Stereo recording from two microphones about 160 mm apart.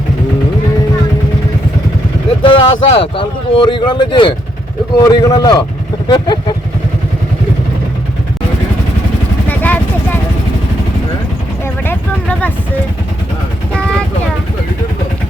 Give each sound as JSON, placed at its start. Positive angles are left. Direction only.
{"t": 2.4, "sound": "speech", "side_deg": 35}
{"t": 9.5, "sound": "vehicle", "side_deg": 10}
{"t": 11.9, "sound": "vehicle", "side_deg": 10}